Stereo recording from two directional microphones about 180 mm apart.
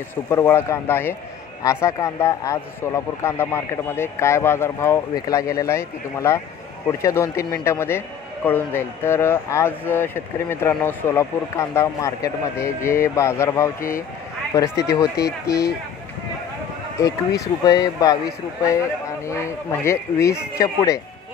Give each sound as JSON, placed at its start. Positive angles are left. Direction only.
{"t": 0.1, "sound": "speech", "side_deg": 15}
{"t": 13.7, "sound": "speech", "side_deg": 50}
{"t": 17.0, "sound": "speech", "side_deg": 20}